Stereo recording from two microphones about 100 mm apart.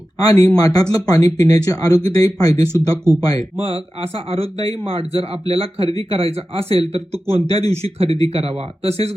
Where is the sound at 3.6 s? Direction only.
75° right (ahead or behind).